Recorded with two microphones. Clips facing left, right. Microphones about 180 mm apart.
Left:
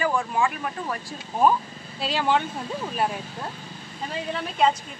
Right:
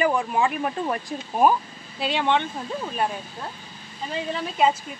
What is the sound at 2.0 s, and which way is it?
Speech, centre (ahead or behind).